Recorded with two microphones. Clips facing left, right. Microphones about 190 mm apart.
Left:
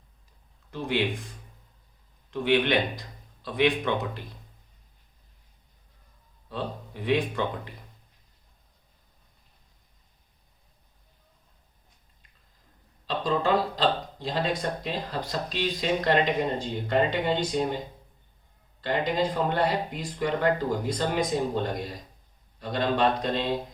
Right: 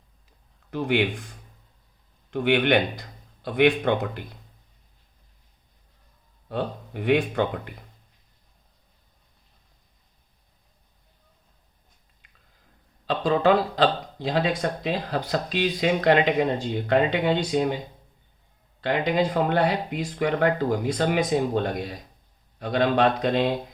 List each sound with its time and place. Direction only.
0.7 s speech: 60° right (ahead or behind)
2.3 s speech: 60° right (ahead or behind)
6.5 s speech: 60° right (ahead or behind)
13.1 s speech: 70° right (ahead or behind)
18.8 s speech: 65° right (ahead or behind)